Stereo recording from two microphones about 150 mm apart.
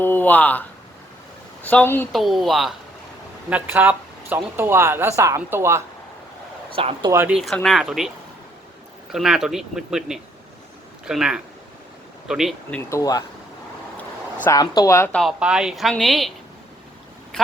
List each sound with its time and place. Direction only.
0.0 s speech: 15° left (ahead or behind)
1.6 s speech: 10° left (ahead or behind)
2.1 s a woman's voice: centre (ahead or behind)
3.5 s speech: 10° right (ahead or behind)
6.7 s speech: 40° right (ahead or behind)
7.1 s speech: 15° right (ahead or behind)
7.3 s a woman's voice: centre (ahead or behind)
9.1 s a woman's voice: 5° right (ahead or behind)
12.7 s speech: 20° left (ahead or behind)
14.4 s speech: 25° left (ahead or behind)
15.1 s a woman's voice: centre (ahead or behind)